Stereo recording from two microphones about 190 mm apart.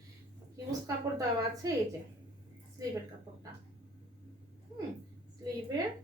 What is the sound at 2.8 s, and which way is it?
Speech, 20° right (ahead or behind).